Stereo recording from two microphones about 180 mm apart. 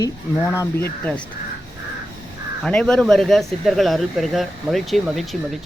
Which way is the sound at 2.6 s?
5° left (ahead or behind).